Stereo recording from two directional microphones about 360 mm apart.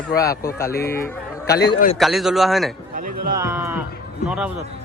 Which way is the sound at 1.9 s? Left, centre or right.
Centre.